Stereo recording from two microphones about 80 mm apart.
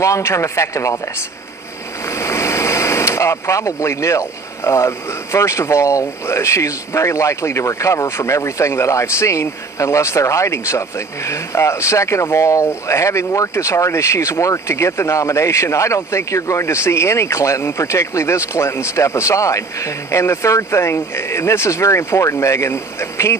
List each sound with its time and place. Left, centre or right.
0.0 s speech: left
2.0 s speech: left